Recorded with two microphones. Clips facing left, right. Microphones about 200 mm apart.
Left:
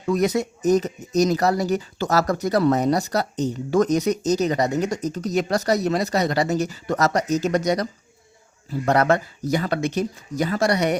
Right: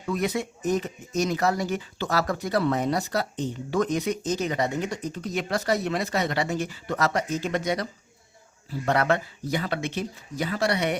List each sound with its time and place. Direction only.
0.0 s speech: 40° left (ahead or behind)